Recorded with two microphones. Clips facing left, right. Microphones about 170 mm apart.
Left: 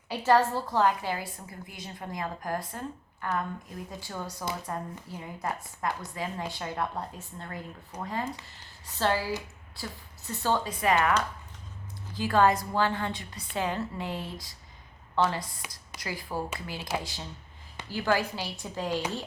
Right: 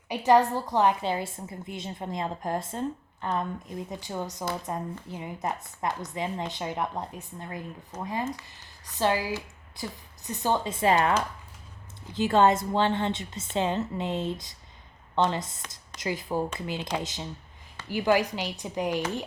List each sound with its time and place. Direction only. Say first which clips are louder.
0.1 s a woman's voice: right 2 dB; 15° right (ahead or behind)
12.1 s a woman's voice: right 2 dB; 25° right (ahead or behind)